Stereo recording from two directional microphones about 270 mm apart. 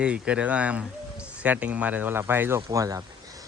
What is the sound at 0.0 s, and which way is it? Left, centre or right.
Speech, centre.